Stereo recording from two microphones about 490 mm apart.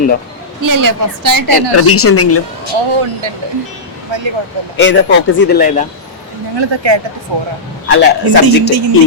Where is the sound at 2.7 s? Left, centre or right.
Right.